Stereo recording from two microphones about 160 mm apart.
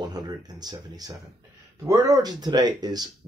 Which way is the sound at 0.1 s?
25° right (ahead or behind).